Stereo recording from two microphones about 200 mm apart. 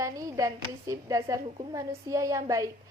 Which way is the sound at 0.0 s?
15° right (ahead or behind).